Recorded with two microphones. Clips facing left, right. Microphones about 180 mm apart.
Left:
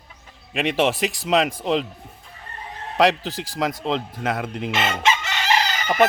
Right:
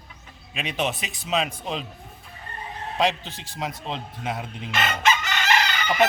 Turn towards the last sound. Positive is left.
turn(degrees=45)  # may be behind; listen again after turning